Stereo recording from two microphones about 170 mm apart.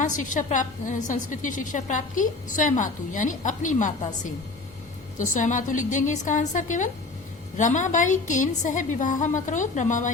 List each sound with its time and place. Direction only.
0.0 s a woman's voice: 50° left (ahead or behind)